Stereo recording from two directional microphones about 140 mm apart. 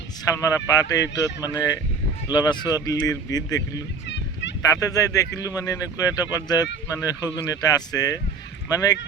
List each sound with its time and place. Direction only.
0.3 s speech: 25° left (ahead or behind)
4.8 s speech: 25° left (ahead or behind)